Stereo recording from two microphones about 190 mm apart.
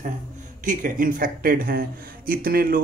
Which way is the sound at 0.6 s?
45° right (ahead or behind).